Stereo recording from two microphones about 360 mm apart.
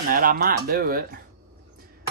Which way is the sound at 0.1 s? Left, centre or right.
Right.